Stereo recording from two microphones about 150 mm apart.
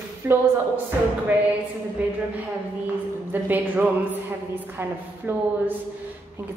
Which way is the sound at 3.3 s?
15° right (ahead or behind).